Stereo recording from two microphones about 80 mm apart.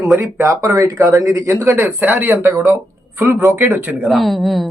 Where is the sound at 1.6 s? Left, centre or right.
Right.